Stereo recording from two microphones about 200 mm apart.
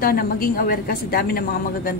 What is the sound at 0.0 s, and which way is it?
A woman's voice, 50° left (ahead or behind).